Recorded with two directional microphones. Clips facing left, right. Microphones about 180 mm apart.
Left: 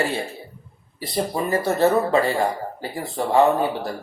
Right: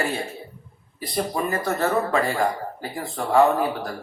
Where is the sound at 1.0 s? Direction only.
30° left (ahead or behind).